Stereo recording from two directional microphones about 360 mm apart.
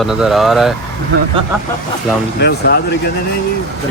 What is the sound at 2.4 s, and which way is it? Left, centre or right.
Speech, left.